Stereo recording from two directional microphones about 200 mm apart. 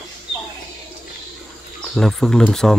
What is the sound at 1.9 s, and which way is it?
Speech, 5° left (ahead or behind).